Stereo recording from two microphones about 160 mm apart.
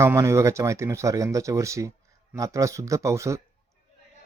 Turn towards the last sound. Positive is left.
turn(degrees=-20)  # may be behind; listen again after turning